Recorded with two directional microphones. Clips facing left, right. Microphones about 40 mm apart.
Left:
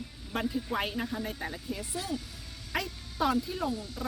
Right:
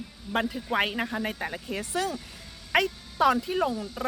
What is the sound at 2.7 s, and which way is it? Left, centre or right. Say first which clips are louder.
Speech: right 9 dB; right.